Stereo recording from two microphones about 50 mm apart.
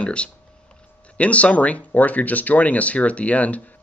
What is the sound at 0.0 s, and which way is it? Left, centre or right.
Speech, left.